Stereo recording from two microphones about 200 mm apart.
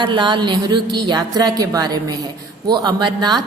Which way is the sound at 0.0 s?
25° right (ahead or behind).